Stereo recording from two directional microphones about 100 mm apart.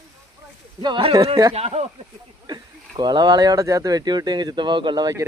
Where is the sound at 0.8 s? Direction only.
50° right (ahead or behind).